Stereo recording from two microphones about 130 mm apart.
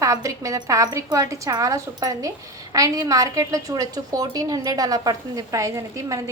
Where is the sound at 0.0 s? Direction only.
25° right (ahead or behind).